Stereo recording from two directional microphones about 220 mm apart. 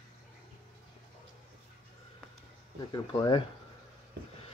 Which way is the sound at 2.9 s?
20° left (ahead or behind).